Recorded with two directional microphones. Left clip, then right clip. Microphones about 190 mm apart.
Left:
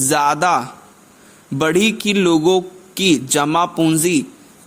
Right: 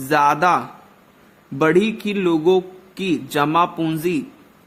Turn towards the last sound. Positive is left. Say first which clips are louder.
# left 6 dB
turn(degrees=30)  # may be behind; listen again after turning